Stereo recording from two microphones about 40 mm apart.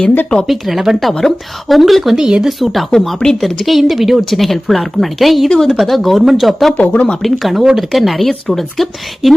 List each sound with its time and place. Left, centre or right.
0.4 s speech: centre
2.1 s speech: centre
2.5 s speech: centre
2.9 s speech: centre
3.4 s speech: centre
5.5 s speech: centre
5.7 s speech: centre
6.8 s speech: left
7.2 s speech: centre
7.6 s speech: centre
7.9 s speech: centre